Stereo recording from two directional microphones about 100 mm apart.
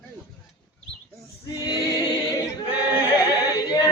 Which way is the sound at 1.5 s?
40° left (ahead or behind).